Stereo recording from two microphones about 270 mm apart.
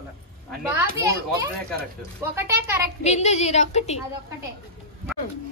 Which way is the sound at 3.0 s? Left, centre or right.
Left.